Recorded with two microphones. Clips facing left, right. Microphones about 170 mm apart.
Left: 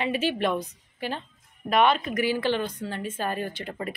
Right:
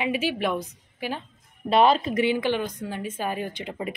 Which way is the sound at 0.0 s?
10° right (ahead or behind).